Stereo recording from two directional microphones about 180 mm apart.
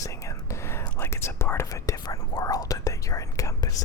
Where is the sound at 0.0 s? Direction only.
15° left (ahead or behind).